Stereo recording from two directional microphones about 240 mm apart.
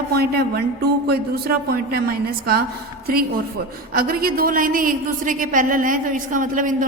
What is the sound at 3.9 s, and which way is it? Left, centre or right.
A woman's voice, right.